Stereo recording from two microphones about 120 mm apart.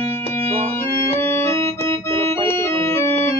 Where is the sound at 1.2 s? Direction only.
20° left (ahead or behind).